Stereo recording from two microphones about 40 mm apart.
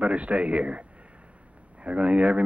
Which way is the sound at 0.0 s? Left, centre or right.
Right.